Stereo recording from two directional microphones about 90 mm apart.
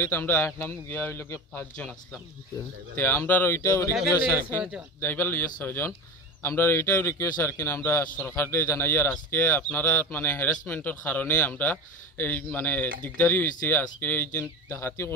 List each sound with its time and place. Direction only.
0.0 s speech: 25° left (ahead or behind)
3.0 s speech: 25° left (ahead or behind)
5.0 s speech: 25° left (ahead or behind)